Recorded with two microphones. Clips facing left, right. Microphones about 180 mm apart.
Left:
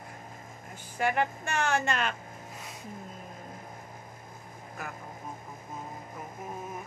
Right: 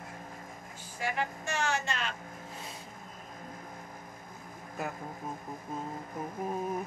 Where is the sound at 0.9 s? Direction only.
60° left (ahead or behind).